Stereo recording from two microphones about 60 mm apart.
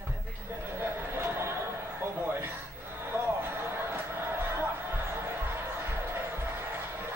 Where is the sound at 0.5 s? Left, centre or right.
Right.